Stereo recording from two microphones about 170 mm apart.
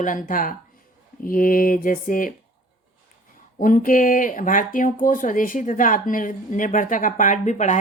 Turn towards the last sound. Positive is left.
turn(degrees=45)  # may be behind; listen again after turning